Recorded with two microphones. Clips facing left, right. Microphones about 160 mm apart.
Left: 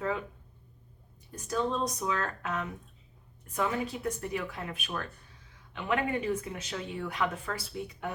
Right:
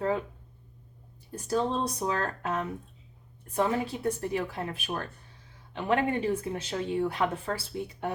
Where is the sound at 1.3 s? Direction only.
35° right (ahead or behind).